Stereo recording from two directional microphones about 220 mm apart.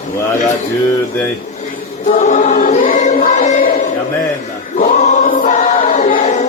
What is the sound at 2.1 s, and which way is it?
Choir, 35° left (ahead or behind).